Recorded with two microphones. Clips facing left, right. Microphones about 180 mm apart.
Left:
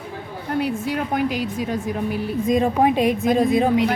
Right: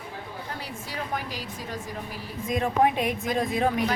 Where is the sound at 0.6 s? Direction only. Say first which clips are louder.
Left 12 dB; 65° left (ahead or behind).